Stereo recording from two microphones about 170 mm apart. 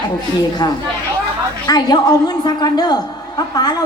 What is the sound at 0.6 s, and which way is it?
A man's voice, 20° left (ahead or behind).